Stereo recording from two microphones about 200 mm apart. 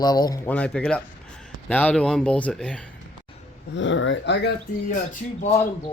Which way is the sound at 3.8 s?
70° left (ahead or behind).